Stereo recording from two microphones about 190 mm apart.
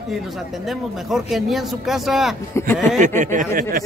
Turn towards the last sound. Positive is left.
turn(degrees=-45)  # may be behind; listen again after turning